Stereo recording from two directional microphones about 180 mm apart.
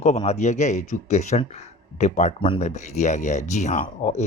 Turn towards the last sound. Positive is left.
turn(degrees=45)  # may be behind; listen again after turning